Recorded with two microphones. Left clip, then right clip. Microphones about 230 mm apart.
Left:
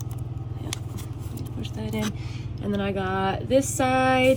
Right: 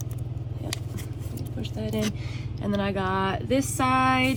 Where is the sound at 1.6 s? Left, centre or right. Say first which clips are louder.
Right 2 dB; right.